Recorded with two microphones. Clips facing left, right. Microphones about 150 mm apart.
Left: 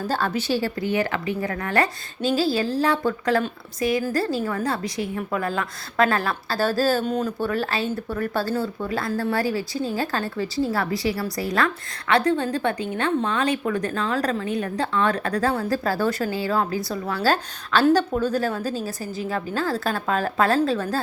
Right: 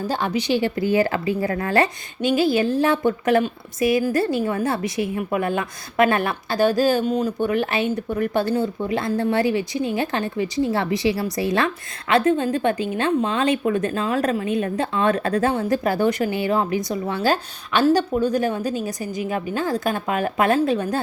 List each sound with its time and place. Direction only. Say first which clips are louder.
0.1 s a woman's voice: right 2 dB; 15° right (ahead or behind)
0.9 s a woman's voice: right 4 dB; 30° right (ahead or behind)